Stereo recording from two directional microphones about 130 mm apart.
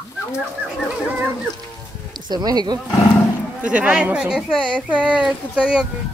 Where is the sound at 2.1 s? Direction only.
35° right (ahead or behind).